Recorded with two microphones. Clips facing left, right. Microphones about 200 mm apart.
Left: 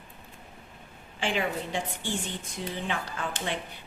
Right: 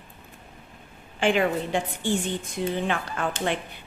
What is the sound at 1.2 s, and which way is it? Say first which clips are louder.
A woman's voice: right 7 dB; 55° right (ahead or behind).